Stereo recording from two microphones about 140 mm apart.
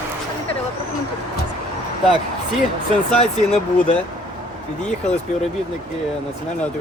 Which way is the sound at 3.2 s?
55° left (ahead or behind).